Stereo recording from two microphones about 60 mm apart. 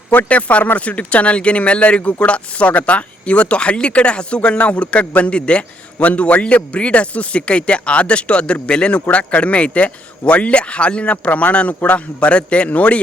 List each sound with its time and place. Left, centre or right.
0.1 s speech: left